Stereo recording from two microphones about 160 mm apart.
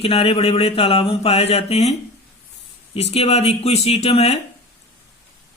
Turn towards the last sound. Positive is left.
turn(degrees=40)  # may be behind; listen again after turning